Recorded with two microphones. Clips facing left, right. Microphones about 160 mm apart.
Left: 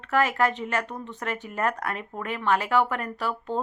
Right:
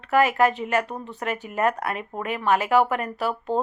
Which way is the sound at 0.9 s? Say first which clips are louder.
Right 2 dB; 40° right (ahead or behind).